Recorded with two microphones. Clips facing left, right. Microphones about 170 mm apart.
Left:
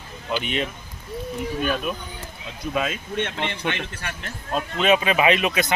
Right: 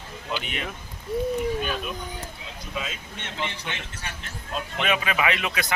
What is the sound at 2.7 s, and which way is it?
Speech, 60° left (ahead or behind).